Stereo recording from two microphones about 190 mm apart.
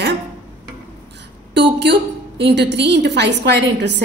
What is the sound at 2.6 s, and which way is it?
A woman's voice, 65° right (ahead or behind).